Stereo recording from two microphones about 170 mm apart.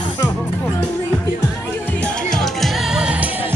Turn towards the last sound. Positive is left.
turn(degrees=-5)  # may be behind; listen again after turning